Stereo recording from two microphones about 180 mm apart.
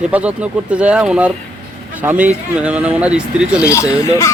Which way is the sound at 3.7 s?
15° left (ahead or behind).